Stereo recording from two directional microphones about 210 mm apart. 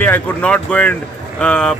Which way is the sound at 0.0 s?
5° left (ahead or behind).